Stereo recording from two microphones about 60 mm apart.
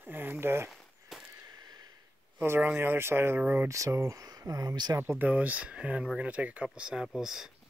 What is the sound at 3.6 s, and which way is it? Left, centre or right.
Speech, right.